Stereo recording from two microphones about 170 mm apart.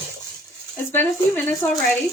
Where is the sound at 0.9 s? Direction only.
10° left (ahead or behind).